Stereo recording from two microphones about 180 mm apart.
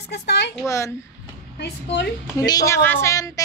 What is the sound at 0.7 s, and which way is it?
Speech, 15° left (ahead or behind).